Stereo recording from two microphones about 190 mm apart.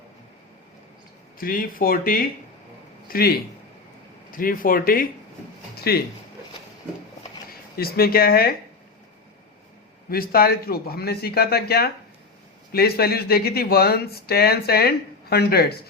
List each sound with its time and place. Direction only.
1.4 s speech: 50° left (ahead or behind)
5.7 s a sound: 55° left (ahead or behind)
7.8 s speech: 55° left (ahead or behind)
10.1 s speech: 50° left (ahead or behind)